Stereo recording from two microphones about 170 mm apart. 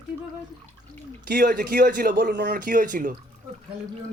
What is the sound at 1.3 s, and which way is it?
A man's voice, 60° right (ahead or behind).